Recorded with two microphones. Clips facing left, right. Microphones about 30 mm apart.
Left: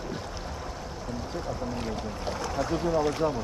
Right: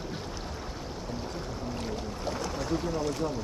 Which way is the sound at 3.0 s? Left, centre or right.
Left.